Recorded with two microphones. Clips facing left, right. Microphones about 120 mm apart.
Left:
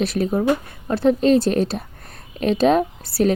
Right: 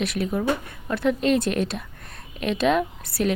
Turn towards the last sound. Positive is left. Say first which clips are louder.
# left 5 dB
turn(degrees=35)  # may be behind; listen again after turning